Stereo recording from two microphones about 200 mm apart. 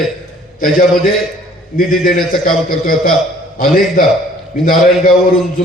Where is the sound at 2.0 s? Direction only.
45° left (ahead or behind).